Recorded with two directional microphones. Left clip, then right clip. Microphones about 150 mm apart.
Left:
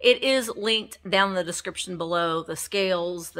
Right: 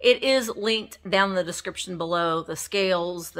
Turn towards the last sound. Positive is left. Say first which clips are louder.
# right 1 dB
turn(degrees=-5)  # may be behind; listen again after turning